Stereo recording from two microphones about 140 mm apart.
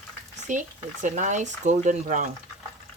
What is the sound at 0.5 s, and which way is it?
Speech, 65° right (ahead or behind).